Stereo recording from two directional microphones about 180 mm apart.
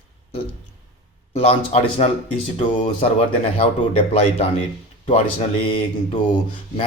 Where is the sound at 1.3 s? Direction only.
35° left (ahead or behind).